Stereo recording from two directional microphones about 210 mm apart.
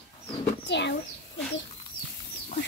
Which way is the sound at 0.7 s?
55° left (ahead or behind).